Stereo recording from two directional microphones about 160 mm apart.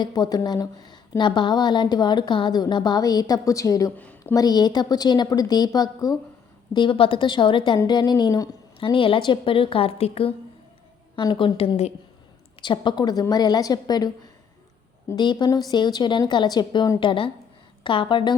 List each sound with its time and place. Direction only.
0.0 s speech: 25° left (ahead or behind)
3.9 s a woman's voice: 10° left (ahead or behind)
4.2 s a woman's voice: 20° left (ahead or behind); by 11.9 s 40° left (ahead or behind)
12.6 s a woman's voice: 30° left (ahead or behind)